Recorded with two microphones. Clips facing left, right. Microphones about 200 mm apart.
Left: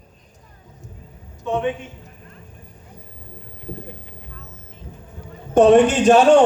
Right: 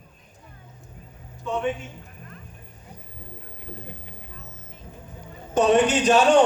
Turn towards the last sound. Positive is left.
turn(degrees=55)  # may be behind; listen again after turning